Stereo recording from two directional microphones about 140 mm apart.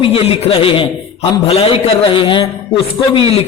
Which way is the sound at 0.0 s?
40° left (ahead or behind).